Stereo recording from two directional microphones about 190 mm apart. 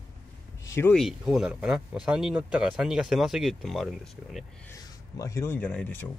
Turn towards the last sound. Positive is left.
turn(degrees=5)  # may be behind; listen again after turning